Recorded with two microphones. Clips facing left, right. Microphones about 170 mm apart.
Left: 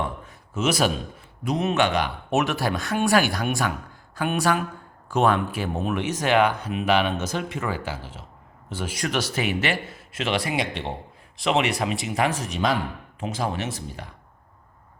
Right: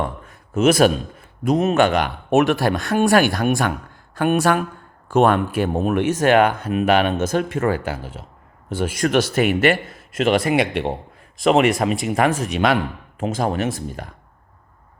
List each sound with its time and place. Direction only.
0.0 s a sound: 55° right (ahead or behind)
1.5 s speech: 50° right (ahead or behind)
11.3 s speech: 45° right (ahead or behind); by 12.8 s 70° right (ahead or behind)
13.1 s speech: 50° right (ahead or behind)